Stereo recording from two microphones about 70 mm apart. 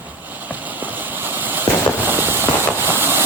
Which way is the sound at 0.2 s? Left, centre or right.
Right.